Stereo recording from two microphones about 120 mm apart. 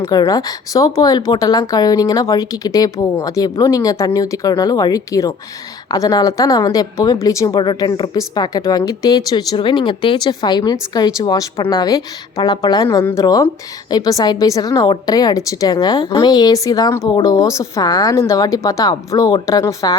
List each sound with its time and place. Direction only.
0.3 s a woman's voice: 30° left (ahead or behind)